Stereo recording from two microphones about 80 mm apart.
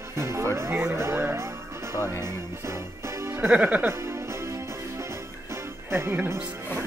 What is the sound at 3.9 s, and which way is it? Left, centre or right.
Music, right.